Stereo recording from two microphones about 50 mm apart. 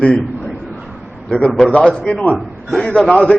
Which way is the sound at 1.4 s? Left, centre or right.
Left.